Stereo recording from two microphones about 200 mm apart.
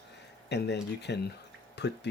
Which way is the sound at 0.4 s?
60° left (ahead or behind).